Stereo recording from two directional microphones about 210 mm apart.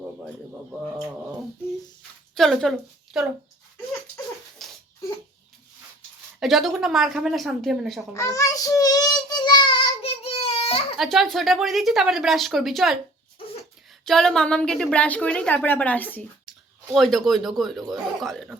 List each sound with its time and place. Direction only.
2.3 s a woman's voice: centre (ahead or behind)
4.6 s a sound: centre (ahead or behind)
6.4 s a woman's voice: centre (ahead or behind)
8.1 s child singing: 15° left (ahead or behind)
10.9 s a woman's voice: centre (ahead or behind)
14.0 s a woman's voice: centre (ahead or behind)